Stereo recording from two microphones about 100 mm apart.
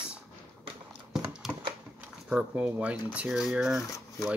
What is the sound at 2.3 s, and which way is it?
Speech, 15° right (ahead or behind).